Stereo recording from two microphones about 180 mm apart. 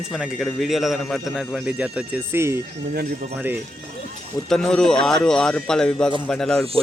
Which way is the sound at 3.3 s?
10° right (ahead or behind).